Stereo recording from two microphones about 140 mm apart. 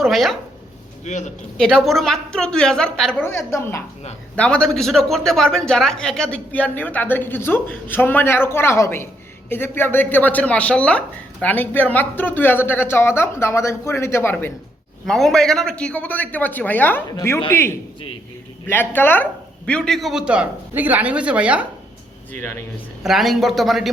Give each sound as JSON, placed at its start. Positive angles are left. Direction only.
{"t": 0.0, "sound": "a sound", "side_deg": 0}
{"t": 1.1, "sound": "speech", "side_deg": 55}
{"t": 1.5, "sound": "a woman's voice", "side_deg": 5}
{"t": 3.2, "sound": "speech", "side_deg": 15}
{"t": 4.4, "sound": "speech", "side_deg": 5}
{"t": 15.0, "sound": "a woman's voice", "side_deg": 0}
{"t": 23.0, "sound": "a woman's voice", "side_deg": 0}